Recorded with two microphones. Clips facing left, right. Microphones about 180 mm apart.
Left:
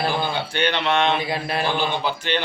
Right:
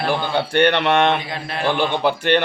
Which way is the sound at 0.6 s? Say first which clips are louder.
Right 5 dB; 65° right (ahead or behind).